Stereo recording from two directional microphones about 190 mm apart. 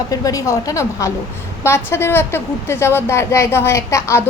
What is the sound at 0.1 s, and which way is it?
A woman's voice, 20° left (ahead or behind).